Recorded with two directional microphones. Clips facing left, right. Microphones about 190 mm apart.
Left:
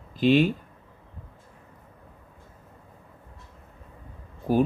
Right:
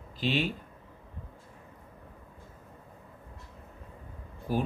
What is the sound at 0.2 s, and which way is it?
Speech, 50° left (ahead or behind).